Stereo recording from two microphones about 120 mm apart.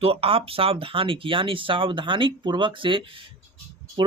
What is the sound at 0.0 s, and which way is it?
Speech, 50° right (ahead or behind).